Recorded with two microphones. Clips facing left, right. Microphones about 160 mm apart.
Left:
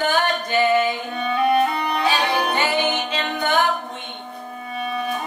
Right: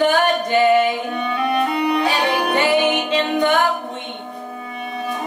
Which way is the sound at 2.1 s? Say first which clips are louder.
Right 2 dB; 15° right (ahead or behind).